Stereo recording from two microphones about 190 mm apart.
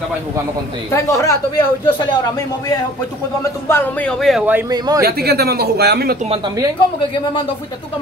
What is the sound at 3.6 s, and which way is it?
Speech, 10° left (ahead or behind).